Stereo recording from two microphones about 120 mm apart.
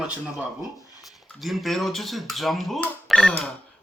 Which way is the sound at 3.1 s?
Centre (ahead or behind).